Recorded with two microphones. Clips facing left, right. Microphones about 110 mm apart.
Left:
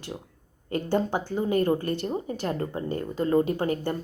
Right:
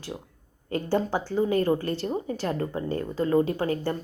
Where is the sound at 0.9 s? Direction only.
20° left (ahead or behind).